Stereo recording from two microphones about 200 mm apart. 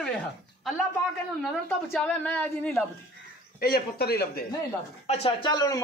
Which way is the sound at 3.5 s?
50° left (ahead or behind).